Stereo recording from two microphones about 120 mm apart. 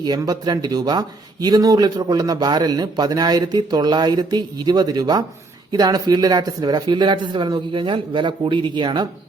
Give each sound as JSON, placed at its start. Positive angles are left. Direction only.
{"t": 0.2, "sound": "speech", "side_deg": -30}